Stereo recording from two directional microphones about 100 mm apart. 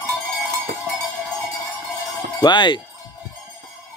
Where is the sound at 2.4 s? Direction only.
50° left (ahead or behind).